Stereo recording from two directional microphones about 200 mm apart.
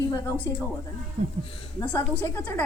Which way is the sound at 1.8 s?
10° left (ahead or behind).